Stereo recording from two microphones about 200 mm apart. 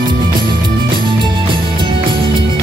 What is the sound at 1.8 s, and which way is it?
Music, 25° right (ahead or behind).